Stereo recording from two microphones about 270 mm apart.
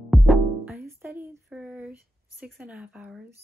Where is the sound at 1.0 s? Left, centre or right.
Centre.